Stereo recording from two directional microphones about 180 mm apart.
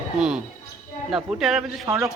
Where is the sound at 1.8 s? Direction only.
15° right (ahead or behind).